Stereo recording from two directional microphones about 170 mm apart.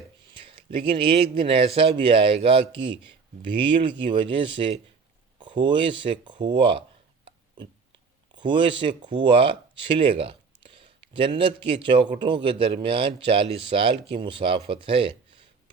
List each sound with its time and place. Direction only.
0.5 s speech: 30° right (ahead or behind)
7.3 s a sound: 30° right (ahead or behind)
8.4 s speech: 30° right (ahead or behind)